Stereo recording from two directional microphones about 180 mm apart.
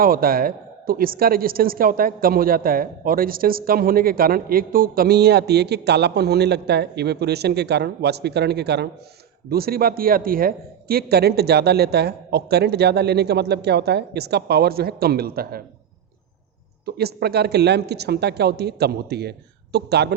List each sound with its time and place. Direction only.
0.0 s a woman's voice: 55° right (ahead or behind)
16.8 s a woman's voice: 60° right (ahead or behind)